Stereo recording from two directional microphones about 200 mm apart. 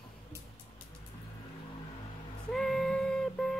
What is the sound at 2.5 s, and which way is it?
Music, centre (ahead or behind).